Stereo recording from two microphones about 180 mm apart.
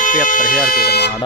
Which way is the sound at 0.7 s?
60° left (ahead or behind).